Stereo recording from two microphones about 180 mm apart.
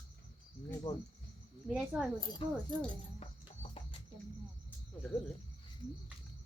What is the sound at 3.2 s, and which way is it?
Music, 35° left (ahead or behind).